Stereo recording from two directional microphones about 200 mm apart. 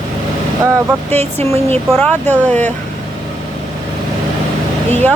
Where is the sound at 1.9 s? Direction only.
Centre (ahead or behind).